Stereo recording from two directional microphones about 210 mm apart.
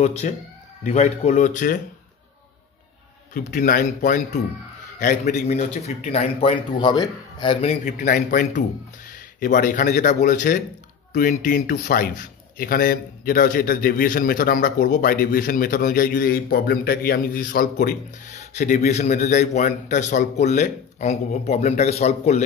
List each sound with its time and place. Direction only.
0.0 s a man's voice: 30° left (ahead or behind)
3.3 s a man's voice: 40° left (ahead or behind)